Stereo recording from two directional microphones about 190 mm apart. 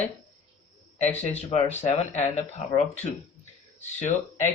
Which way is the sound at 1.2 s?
35° left (ahead or behind).